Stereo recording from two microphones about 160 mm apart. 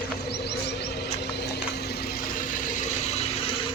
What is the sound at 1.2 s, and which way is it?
Vehicle, 90° left.